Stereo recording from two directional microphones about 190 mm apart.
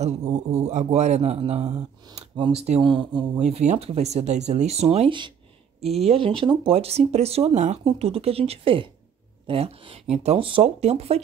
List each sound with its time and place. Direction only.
0.0 s speech: 35° right (ahead or behind)
3.3 s speech: 35° right (ahead or behind)